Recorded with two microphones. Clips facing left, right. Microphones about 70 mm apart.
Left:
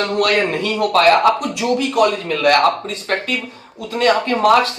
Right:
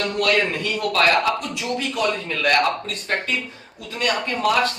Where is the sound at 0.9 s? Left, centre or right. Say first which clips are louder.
Left 7 dB; left.